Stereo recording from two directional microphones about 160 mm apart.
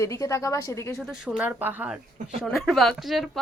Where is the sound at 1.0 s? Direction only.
5° right (ahead or behind).